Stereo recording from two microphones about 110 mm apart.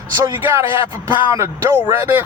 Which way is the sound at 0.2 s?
25° right (ahead or behind).